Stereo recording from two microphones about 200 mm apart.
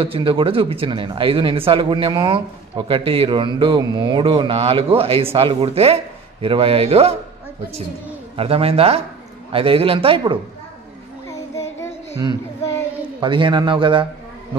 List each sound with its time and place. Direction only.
0.0 s speech: 25° right (ahead or behind)
8.4 s speech: 30° right (ahead or behind)
11.2 s child singing: 15° left (ahead or behind)
13.2 s speech: 25° right (ahead or behind)